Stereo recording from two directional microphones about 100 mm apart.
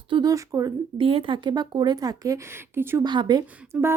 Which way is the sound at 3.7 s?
25° right (ahead or behind).